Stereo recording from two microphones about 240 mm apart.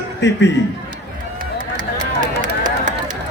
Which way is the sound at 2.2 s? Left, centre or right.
Right.